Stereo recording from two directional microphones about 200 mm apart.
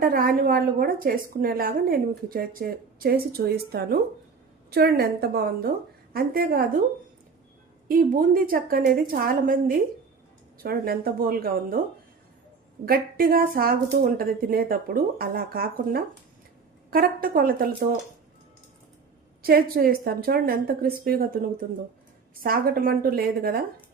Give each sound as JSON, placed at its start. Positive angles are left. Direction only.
{"t": 0.0, "sound": "a woman's voice", "side_deg": -45}
{"t": 7.9, "sound": "a woman's voice", "side_deg": -45}
{"t": 12.8, "sound": "a woman's voice", "side_deg": -45}
{"t": 19.4, "sound": "a woman's voice", "side_deg": -50}